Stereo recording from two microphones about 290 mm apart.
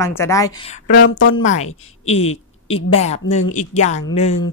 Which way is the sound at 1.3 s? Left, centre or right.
Left.